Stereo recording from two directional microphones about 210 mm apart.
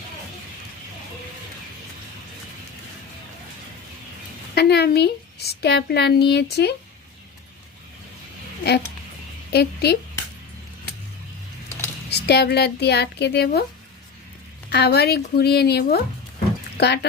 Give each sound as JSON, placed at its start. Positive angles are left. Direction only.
{"t": 4.5, "sound": "a woman's voice", "side_deg": 50}
{"t": 9.5, "sound": "a woman's voice", "side_deg": 50}
{"t": 12.1, "sound": "a woman's voice", "side_deg": 50}
{"t": 14.7, "sound": "a woman's voice", "side_deg": 50}